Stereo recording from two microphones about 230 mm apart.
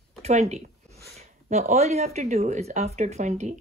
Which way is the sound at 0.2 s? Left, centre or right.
Right.